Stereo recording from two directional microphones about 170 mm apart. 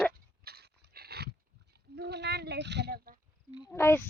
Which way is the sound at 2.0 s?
75° right (ahead or behind).